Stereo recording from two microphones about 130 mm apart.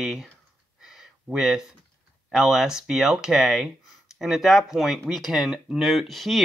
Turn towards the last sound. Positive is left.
turn(degrees=0)  # may be behind; listen again after turning